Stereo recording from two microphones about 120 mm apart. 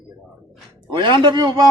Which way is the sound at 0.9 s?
40° right (ahead or behind).